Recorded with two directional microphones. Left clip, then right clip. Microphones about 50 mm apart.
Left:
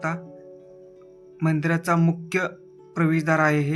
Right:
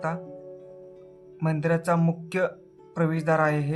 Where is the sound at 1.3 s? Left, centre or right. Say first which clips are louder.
Left 1 dB; left.